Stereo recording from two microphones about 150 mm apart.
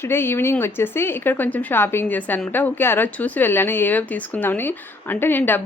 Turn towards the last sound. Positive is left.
turn(degrees=15)  # may be behind; listen again after turning